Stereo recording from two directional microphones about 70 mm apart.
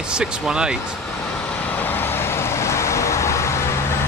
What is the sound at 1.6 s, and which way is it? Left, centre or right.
Vehicle, left.